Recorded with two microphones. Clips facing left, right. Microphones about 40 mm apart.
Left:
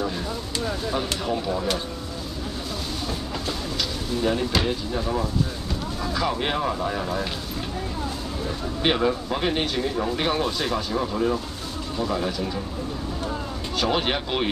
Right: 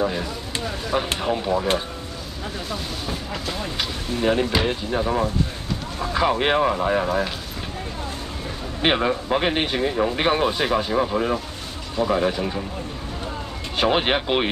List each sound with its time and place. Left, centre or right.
0.0 s speech: right
3.6 s speech: right
8.8 s speech: right
13.7 s speech: right